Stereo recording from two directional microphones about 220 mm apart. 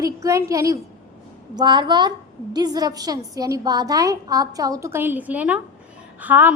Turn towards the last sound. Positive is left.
turn(degrees=-10)  # may be behind; listen again after turning